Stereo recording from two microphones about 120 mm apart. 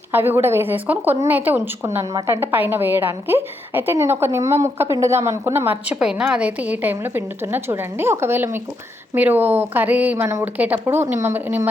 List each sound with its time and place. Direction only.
0.1 s a woman's voice: 20° right (ahead or behind)
5.8 s a woman's voice: 10° right (ahead or behind)